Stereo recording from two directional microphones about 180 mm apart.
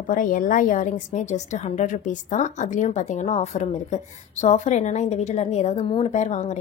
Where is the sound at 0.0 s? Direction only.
50° left (ahead or behind).